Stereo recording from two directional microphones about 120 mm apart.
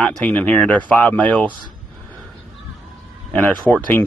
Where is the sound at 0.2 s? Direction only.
15° left (ahead or behind).